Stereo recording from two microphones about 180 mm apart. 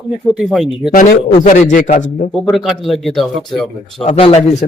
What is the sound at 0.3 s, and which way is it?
Speech, centre (ahead or behind).